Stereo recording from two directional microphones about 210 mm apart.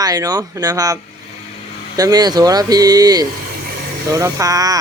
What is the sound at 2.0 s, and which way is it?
A man's voice, 20° right (ahead or behind).